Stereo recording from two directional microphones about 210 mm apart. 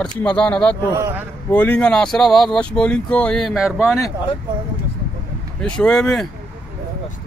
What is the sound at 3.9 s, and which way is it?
Speech, 15° left (ahead or behind).